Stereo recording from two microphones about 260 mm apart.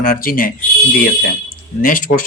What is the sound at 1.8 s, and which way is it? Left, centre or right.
Speech, left.